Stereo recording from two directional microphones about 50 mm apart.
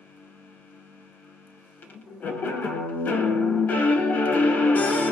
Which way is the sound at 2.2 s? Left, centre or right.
Left.